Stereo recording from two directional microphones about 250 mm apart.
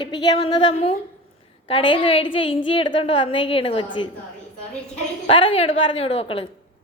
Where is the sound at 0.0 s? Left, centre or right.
Centre.